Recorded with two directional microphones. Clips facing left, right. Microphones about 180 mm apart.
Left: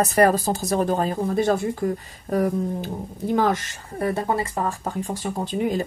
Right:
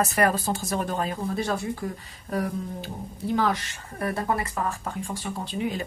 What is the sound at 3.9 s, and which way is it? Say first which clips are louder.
Speech: left 4 dB; 25° left (ahead or behind).